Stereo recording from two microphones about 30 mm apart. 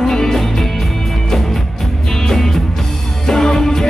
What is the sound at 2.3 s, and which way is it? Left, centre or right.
Music, centre.